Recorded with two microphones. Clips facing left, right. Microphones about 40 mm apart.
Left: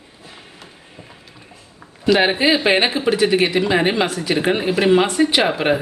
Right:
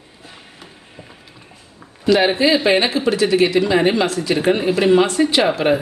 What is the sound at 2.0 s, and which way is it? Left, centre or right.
A man's voice, centre.